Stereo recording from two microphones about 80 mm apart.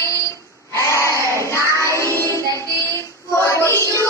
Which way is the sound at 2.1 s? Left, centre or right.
Left.